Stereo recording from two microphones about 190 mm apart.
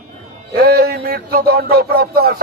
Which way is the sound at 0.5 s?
55° right (ahead or behind).